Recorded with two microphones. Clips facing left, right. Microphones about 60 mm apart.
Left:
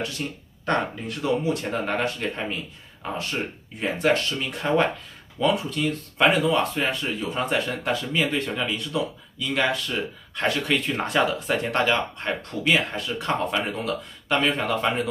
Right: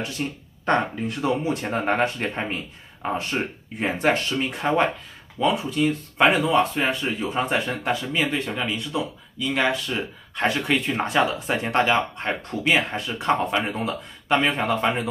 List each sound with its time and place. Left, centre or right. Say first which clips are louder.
0.2 s speech: right 3 dB; centre